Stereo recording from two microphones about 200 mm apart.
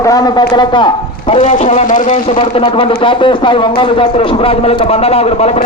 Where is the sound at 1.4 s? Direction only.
35° left (ahead or behind).